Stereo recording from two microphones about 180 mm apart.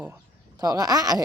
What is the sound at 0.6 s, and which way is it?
Speech, 20° right (ahead or behind).